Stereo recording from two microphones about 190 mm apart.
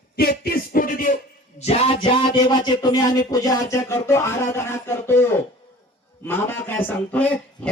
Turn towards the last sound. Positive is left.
turn(degrees=5)  # may be behind; listen again after turning